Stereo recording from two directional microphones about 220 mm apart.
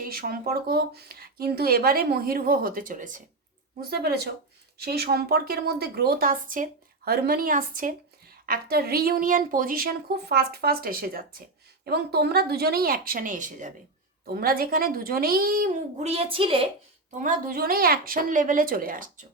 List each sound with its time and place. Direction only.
0.0 s speech: 40° right (ahead or behind); by 16.6 s 25° right (ahead or behind)
17.2 s speech: 40° right (ahead or behind)